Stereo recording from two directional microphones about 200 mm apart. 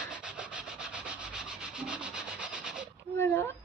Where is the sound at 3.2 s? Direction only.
10° left (ahead or behind).